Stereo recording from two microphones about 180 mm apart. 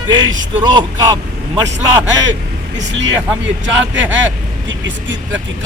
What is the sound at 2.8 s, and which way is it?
Speech, 85° right.